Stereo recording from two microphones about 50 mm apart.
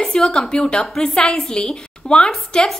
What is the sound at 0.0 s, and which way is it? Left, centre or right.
A woman's voice, centre.